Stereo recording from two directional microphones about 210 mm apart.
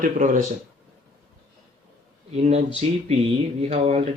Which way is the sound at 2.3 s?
30° right (ahead or behind).